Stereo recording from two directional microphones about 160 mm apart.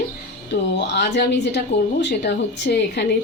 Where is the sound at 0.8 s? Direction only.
90° left.